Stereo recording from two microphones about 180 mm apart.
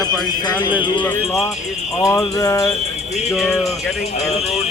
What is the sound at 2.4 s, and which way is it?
Speech, 20° left (ahead or behind).